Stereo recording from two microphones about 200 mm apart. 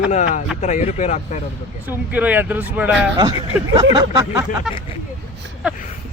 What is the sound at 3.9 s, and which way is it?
Speech, 20° right (ahead or behind).